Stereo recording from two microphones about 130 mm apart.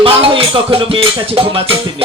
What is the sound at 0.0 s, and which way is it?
Speech, 45° right (ahead or behind).